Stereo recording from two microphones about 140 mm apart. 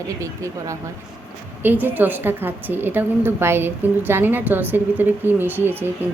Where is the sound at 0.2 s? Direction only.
20° right (ahead or behind).